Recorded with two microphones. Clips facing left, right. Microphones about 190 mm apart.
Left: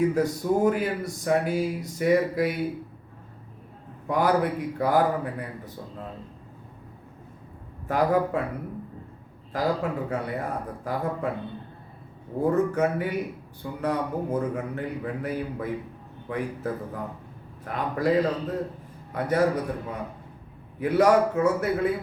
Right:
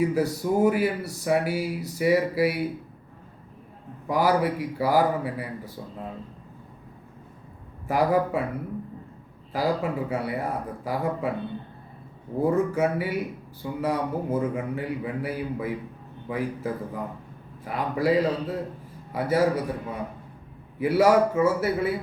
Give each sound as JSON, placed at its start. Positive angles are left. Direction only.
{"t": 0.0, "sound": "speech", "side_deg": -10}
{"t": 4.1, "sound": "speech", "side_deg": -5}
{"t": 7.9, "sound": "speech", "side_deg": -10}
{"t": 9.5, "sound": "speech", "side_deg": -10}
{"t": 12.4, "sound": "speech", "side_deg": -5}
{"t": 20.7, "sound": "speech", "side_deg": -5}